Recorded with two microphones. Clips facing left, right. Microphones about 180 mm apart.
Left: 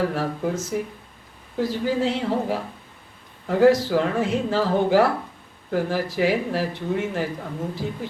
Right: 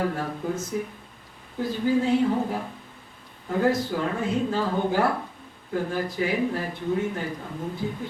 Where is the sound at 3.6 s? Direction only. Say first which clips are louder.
Left 7 dB; 90° left.